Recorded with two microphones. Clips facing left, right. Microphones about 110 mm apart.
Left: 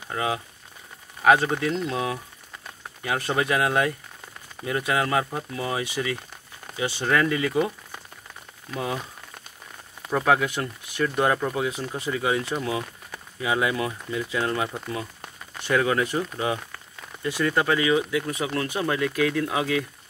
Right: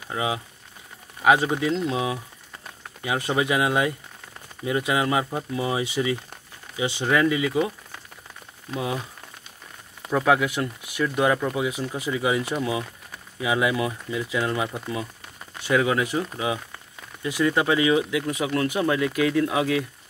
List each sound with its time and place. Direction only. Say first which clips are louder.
0.1 s speech: even; 15° right (ahead or behind)
8.7 s speech: right 1 dB; 10° right (ahead or behind)
10.1 s speech: right 1 dB; 5° right (ahead or behind)